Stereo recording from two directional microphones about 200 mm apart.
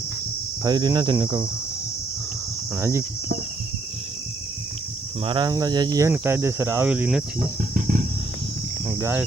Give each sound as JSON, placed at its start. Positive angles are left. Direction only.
{"t": 0.6, "sound": "speech", "side_deg": -20}
{"t": 2.7, "sound": "speech", "side_deg": -15}
{"t": 5.2, "sound": "speech", "side_deg": -25}
{"t": 8.9, "sound": "speech", "side_deg": -10}